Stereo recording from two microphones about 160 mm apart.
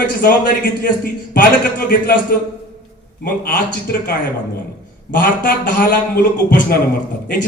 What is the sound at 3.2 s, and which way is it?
Speech, 60° left (ahead or behind).